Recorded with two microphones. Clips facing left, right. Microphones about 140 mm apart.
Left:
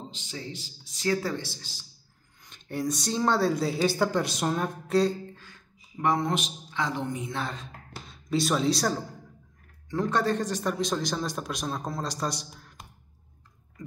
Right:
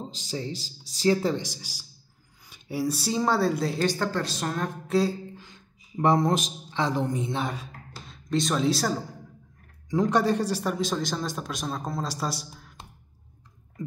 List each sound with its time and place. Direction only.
0.1 s a man's voice: 35° right (ahead or behind); by 4.6 s 15° left (ahead or behind)
4.8 s a sound: centre (ahead or behind)
5.3 s a sound: 15° right (ahead or behind)
5.9 s a woman's voice: 35° right (ahead or behind)
7.3 s speech: 15° right (ahead or behind)
8.1 s speech: 5° left (ahead or behind)
9.8 s a man's voice: 15° right (ahead or behind)